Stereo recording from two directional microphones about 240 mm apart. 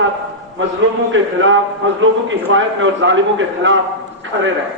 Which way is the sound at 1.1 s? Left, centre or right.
Right.